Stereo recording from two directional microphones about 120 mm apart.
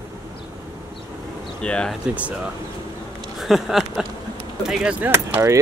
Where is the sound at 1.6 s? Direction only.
10° left (ahead or behind).